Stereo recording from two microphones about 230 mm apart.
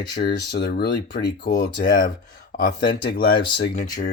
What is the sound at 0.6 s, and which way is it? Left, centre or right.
Speech, left.